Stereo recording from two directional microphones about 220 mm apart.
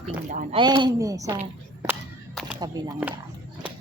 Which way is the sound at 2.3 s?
Centre (ahead or behind).